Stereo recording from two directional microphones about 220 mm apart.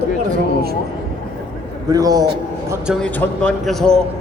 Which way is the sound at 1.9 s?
15° right (ahead or behind).